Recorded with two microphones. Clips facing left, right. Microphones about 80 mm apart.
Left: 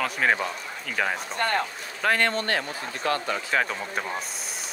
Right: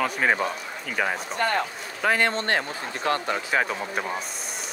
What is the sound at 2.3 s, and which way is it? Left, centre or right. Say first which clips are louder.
A man's voice: right 1 dB; right.